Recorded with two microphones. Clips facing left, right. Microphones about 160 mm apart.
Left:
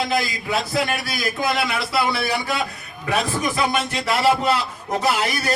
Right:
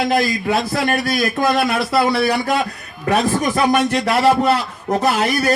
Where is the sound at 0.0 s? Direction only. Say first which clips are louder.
Right 6 dB; 50° right (ahead or behind).